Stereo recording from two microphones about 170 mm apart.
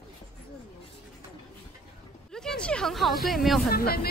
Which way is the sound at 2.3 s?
5° left (ahead or behind).